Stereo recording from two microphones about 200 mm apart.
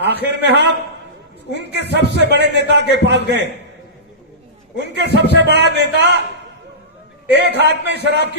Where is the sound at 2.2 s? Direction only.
60° right (ahead or behind).